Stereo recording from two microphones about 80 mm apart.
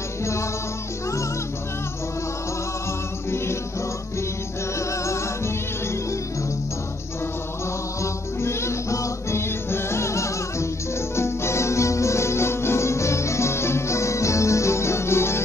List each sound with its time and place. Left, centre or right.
0.2 s music: left
4.7 s music: left
8.0 s music: left